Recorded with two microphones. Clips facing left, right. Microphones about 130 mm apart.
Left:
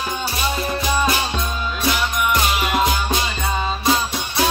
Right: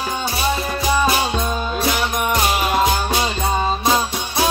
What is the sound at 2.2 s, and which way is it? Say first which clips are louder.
Music: right 1 dB; 40° right (ahead or behind).